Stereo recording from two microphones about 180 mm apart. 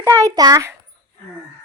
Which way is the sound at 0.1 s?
15° right (ahead or behind).